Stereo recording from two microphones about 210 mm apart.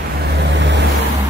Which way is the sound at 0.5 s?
55° right (ahead or behind).